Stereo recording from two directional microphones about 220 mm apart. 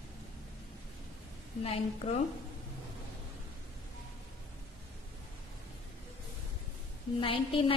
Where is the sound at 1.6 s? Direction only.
25° left (ahead or behind).